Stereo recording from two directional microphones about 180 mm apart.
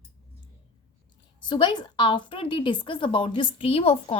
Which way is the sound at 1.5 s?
25° left (ahead or behind).